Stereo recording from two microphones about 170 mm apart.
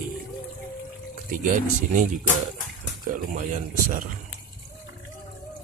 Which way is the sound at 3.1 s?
50° right (ahead or behind).